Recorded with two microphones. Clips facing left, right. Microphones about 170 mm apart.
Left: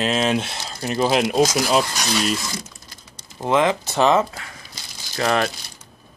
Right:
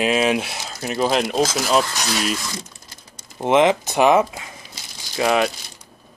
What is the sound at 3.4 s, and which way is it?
Speech, 20° right (ahead or behind).